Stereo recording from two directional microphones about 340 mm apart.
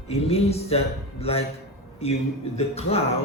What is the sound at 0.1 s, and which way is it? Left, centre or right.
Speech, centre.